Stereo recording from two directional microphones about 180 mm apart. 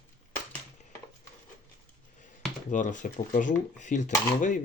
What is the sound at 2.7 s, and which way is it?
Speech, 45° left (ahead or behind).